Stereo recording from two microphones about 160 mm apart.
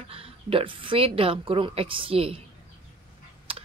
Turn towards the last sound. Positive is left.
turn(degrees=-35)  # may be behind; listen again after turning